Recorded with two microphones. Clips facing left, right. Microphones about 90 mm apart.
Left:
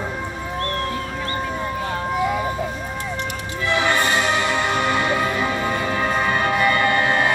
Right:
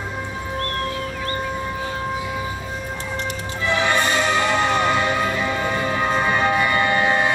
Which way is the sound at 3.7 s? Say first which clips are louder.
Even; 20° right (ahead or behind).